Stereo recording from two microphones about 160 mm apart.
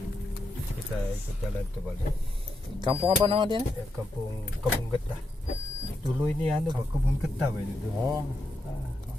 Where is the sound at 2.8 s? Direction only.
30° right (ahead or behind).